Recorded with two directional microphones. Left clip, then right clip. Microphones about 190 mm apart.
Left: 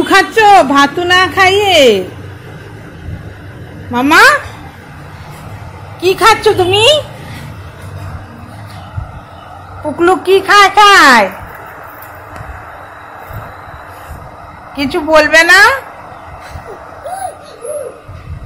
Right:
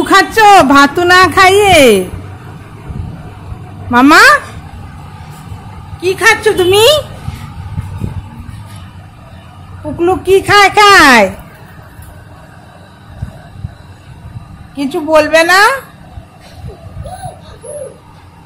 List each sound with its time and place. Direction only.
0.0 s a sound: 10° right (ahead or behind)
0.3 s a woman's voice: 25° right (ahead or behind)
3.9 s a woman's voice: 30° right (ahead or behind)
5.9 s a woman's voice: 5° left (ahead or behind)
6.7 s a woman's voice: 30° right (ahead or behind)
9.9 s a woman's voice: centre (ahead or behind)
10.4 s a woman's voice: 25° right (ahead or behind)
14.8 s a woman's voice: 5° right (ahead or behind)